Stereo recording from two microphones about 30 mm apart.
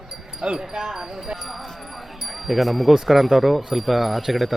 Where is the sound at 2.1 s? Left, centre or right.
Centre.